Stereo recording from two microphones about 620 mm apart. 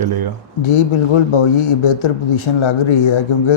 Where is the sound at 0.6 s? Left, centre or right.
Left.